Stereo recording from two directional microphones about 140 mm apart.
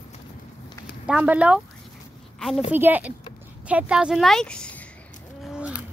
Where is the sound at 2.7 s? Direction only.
15° right (ahead or behind); by 4.8 s 10° left (ahead or behind).